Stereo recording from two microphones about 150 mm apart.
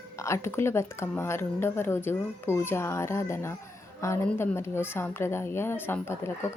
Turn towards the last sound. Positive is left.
turn(degrees=15)  # may be behind; listen again after turning